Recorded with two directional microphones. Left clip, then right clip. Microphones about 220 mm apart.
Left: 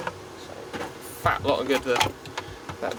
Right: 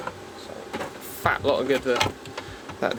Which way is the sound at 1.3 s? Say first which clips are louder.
Right 1 dB; 35° right (ahead or behind).